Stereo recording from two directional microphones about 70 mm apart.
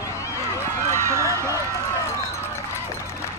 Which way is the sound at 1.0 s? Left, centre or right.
Right.